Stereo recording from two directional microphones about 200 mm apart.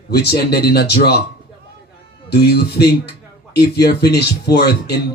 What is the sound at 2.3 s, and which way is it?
Speech, 55° left (ahead or behind).